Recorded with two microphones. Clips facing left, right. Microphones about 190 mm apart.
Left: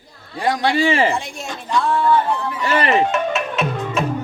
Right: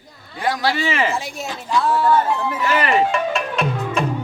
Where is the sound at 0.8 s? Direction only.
30° left (ahead or behind).